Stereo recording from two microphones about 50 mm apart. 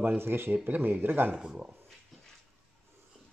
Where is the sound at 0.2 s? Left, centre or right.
Right.